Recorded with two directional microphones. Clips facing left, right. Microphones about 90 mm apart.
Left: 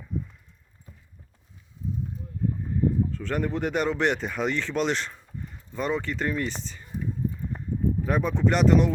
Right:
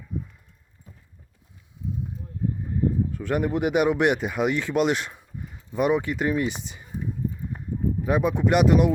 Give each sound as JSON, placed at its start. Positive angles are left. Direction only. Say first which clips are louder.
{"t": 3.1, "sound": "speech", "louder": "right 3 dB", "side_deg": -10}
{"t": 7.5, "sound": "a sound", "louder": "even", "side_deg": -5}
{"t": 8.0, "sound": "speech", "louder": "right 4 dB", "side_deg": -10}